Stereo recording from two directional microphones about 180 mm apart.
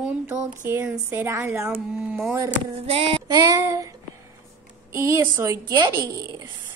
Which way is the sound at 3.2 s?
20° right (ahead or behind).